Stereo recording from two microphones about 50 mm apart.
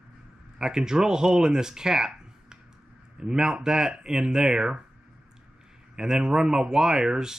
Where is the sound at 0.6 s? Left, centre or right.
Centre.